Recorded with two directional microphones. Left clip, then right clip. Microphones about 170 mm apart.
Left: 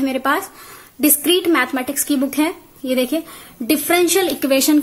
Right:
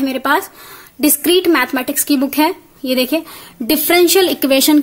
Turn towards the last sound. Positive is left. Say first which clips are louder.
# right 3 dB
turn(degrees=-40)  # may be behind; listen again after turning